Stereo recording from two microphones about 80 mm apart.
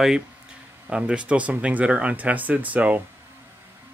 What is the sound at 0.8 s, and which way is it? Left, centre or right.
Speech, centre.